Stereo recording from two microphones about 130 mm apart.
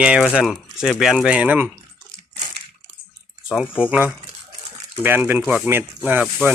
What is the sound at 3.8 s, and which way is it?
Speech, 10° right (ahead or behind).